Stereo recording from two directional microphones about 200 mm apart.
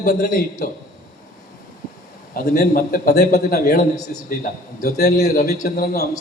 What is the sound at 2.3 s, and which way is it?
A man's voice, 50° left (ahead or behind).